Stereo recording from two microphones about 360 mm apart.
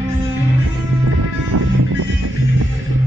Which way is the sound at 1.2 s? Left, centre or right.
Right.